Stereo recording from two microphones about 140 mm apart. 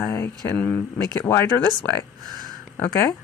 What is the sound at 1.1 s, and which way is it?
Speech, 25° left (ahead or behind).